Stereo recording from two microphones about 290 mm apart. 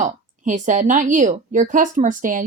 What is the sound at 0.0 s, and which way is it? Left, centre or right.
A woman's voice, right.